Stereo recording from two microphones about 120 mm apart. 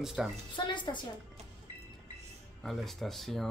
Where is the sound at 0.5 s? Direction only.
40° left (ahead or behind).